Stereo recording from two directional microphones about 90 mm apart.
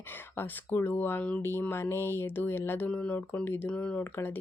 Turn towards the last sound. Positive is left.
turn(degrees=20)  # may be behind; listen again after turning